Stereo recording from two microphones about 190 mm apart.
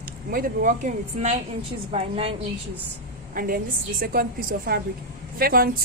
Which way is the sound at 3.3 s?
50° right (ahead or behind).